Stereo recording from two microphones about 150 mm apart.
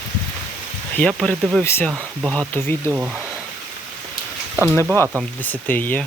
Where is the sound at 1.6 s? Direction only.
15° left (ahead or behind).